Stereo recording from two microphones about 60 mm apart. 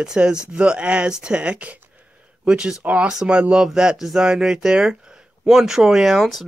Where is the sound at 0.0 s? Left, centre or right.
Centre.